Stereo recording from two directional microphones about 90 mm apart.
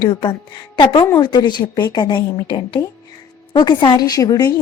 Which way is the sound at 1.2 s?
55° left (ahead or behind).